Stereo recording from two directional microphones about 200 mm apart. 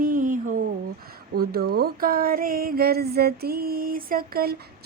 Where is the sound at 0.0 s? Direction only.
40° right (ahead or behind).